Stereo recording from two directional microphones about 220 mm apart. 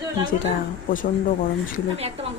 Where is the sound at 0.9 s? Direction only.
40° left (ahead or behind).